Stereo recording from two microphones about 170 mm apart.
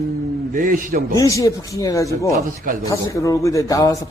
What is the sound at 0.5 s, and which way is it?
Speech, 55° right (ahead or behind).